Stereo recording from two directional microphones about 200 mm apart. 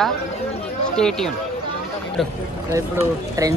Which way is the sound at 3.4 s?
15° right (ahead or behind).